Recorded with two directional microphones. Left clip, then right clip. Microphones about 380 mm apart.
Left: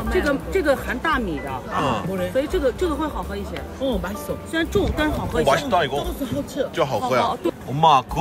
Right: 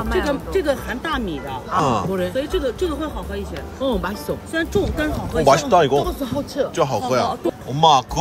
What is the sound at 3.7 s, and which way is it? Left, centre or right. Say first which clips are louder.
Speech: right 3 dB; centre.